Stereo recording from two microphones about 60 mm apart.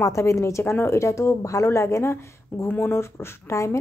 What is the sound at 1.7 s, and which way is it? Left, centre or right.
Speech, left.